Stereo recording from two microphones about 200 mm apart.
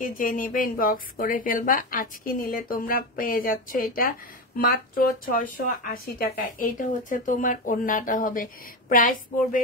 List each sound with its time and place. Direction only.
0.0 s speech: 45° left (ahead or behind)